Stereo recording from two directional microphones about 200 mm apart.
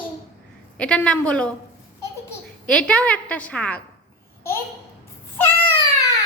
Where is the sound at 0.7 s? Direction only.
5° left (ahead or behind).